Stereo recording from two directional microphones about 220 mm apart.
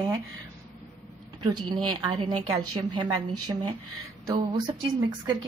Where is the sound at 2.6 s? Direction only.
90° right.